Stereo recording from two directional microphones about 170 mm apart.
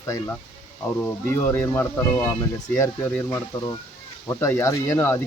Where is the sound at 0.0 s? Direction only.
15° left (ahead or behind).